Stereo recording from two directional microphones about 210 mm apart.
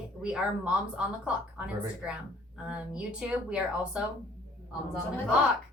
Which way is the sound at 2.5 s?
5° right (ahead or behind).